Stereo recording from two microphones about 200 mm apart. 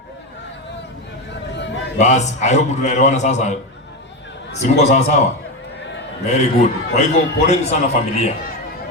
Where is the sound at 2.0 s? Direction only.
35° left (ahead or behind).